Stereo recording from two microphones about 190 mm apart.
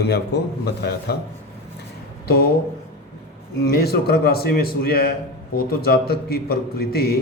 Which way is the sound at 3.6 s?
55° left (ahead or behind).